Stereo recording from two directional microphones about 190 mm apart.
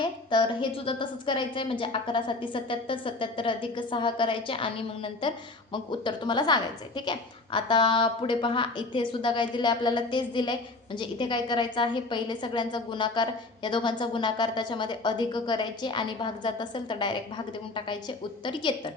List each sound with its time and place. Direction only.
0.0 s a woman's voice: 25° left (ahead or behind)